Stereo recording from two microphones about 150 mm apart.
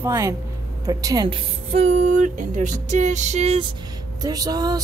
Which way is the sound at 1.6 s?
45° right (ahead or behind).